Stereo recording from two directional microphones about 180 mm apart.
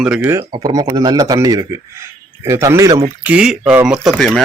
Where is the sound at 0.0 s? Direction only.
10° right (ahead or behind).